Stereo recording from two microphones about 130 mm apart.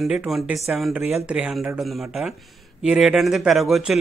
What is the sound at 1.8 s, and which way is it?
Speech, centre (ahead or behind).